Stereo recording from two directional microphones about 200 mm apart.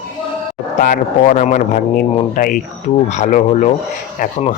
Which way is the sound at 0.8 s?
45° left (ahead or behind).